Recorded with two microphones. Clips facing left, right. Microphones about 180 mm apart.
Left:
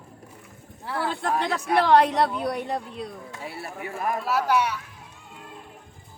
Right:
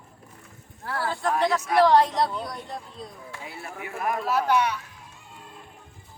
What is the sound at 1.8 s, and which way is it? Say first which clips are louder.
A woman's voice: left 1 dB; 65° left (ahead or behind).